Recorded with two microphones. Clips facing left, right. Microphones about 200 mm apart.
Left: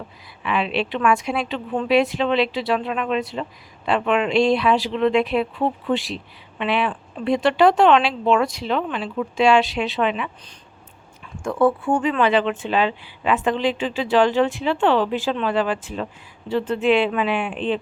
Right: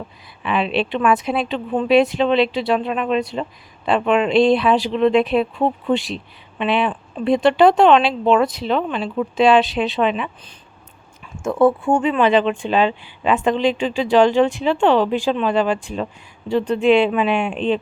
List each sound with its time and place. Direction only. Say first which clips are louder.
0.4 s a woman's voice: right 3 dB; 25° right (ahead or behind)
11.4 s a woman's voice: right 3 dB; 25° right (ahead or behind)